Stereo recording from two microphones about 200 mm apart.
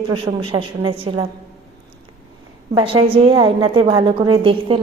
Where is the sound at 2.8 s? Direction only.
25° right (ahead or behind).